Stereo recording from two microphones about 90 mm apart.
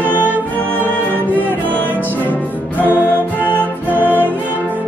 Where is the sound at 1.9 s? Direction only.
20° left (ahead or behind).